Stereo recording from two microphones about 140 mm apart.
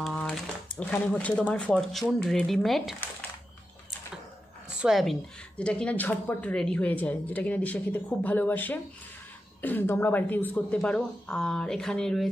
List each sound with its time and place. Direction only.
0.0 s speech: 5° left (ahead or behind)
4.6 s a sound: 5° right (ahead or behind)
5.6 s speech: 10° left (ahead or behind)